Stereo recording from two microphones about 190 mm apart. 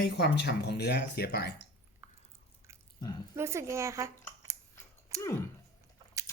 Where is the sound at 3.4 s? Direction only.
15° right (ahead or behind).